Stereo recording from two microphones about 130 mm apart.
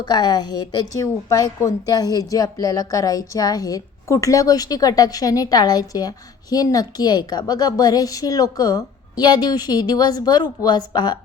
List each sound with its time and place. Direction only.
0.0 s a woman's voice: 35° left (ahead or behind)